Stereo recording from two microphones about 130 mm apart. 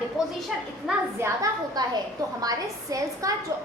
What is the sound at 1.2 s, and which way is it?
A woman's voice, 25° right (ahead or behind).